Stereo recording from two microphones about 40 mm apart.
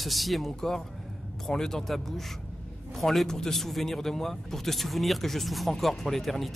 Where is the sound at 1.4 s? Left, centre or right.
Centre.